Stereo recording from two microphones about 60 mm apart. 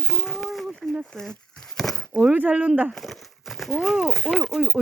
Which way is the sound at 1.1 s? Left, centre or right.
Centre.